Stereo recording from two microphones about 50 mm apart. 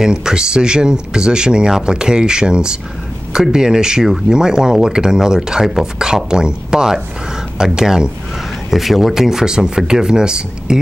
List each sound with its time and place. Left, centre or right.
0.0 s speech: centre